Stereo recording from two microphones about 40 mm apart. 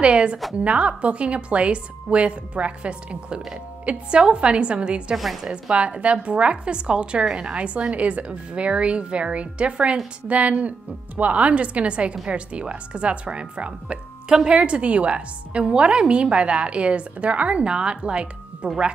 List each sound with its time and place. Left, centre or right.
0.0 s a woman's voice: right
5.1 s a woman's voice: centre
5.4 s a woman's voice: right